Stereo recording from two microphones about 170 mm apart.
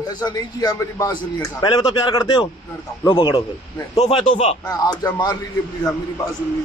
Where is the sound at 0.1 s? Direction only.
25° left (ahead or behind).